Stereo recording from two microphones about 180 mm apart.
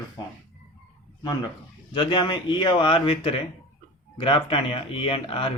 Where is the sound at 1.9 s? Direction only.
25° left (ahead or behind).